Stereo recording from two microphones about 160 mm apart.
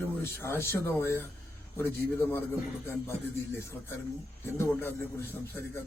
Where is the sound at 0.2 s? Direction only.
15° left (ahead or behind).